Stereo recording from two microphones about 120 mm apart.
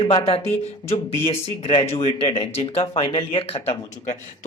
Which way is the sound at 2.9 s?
50° left (ahead or behind).